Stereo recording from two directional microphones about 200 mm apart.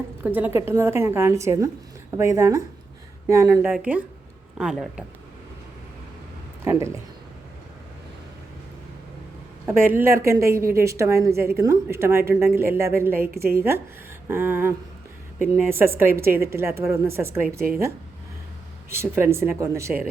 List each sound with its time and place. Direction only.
0.2 s a woman's voice: 10° right (ahead or behind)
6.7 s a woman's voice: 15° right (ahead or behind)
9.8 s a woman's voice: 10° right (ahead or behind)
13.3 s a woman's voice: 50° right (ahead or behind)
13.6 s a woman's voice: 10° right (ahead or behind)
16.0 s a woman's voice: 10° right (ahead or behind)
18.9 s a woman's voice: 10° right (ahead or behind)